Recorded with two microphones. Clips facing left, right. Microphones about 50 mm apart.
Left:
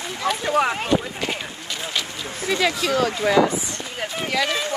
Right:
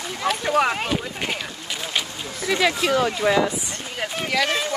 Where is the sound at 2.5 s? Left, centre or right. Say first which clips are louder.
Right 1 dB; right.